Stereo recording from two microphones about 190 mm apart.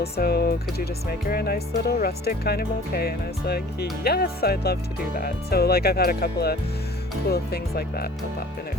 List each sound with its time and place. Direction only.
0.0 s speech: 55° left (ahead or behind)